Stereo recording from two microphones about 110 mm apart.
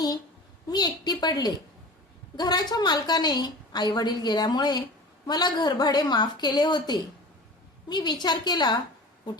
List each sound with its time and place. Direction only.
0.7 s a woman's voice: 40° left (ahead or behind)